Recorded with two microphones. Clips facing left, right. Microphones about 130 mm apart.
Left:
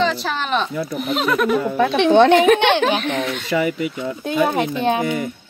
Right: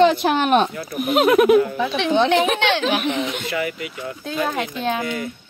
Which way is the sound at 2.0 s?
55° left (ahead or behind).